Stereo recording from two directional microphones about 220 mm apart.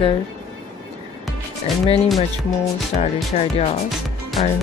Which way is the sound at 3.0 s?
30° left (ahead or behind).